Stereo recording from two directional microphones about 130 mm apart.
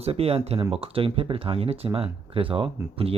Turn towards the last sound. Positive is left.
turn(degrees=-45)  # may be behind; listen again after turning